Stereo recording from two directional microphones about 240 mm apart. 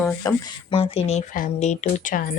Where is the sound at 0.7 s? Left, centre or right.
Left.